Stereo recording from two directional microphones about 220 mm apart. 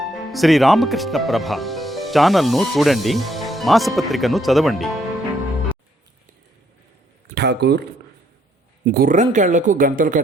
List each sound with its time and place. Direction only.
0.0 s speech: centre (ahead or behind)
7.3 s speech: 45° right (ahead or behind)